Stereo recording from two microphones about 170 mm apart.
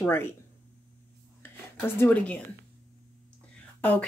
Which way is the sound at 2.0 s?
10° left (ahead or behind).